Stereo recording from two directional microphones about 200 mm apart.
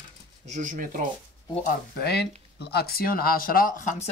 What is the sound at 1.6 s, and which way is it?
Speech, 55° left (ahead or behind).